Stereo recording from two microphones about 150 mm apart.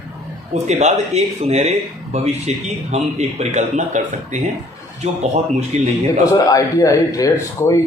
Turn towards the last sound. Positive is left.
turn(degrees=20)  # may be behind; listen again after turning